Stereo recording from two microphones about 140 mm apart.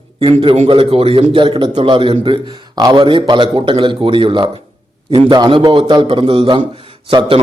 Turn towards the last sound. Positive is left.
turn(degrees=-35)  # may be behind; listen again after turning